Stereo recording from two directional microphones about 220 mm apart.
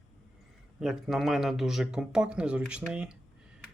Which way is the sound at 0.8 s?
Centre (ahead or behind).